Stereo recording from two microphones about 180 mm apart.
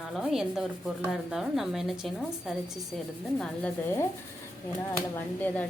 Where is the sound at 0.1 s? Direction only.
Centre (ahead or behind).